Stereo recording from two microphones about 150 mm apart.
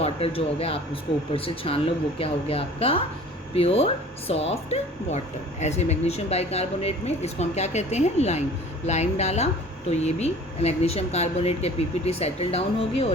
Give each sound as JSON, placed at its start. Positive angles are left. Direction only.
{"t": 0.0, "sound": "speech", "side_deg": 40}